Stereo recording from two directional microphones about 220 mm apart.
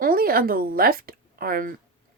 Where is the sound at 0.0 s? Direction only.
40° right (ahead or behind).